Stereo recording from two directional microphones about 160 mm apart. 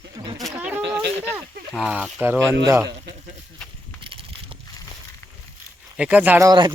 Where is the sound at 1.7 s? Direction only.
5° right (ahead or behind).